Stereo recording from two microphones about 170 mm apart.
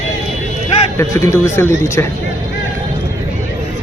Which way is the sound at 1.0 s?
15° left (ahead or behind).